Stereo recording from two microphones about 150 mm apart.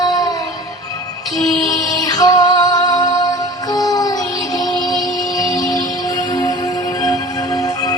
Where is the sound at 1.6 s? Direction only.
25° left (ahead or behind).